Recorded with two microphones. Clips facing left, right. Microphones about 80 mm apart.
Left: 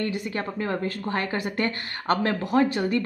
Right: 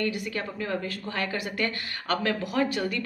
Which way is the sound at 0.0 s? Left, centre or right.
Left.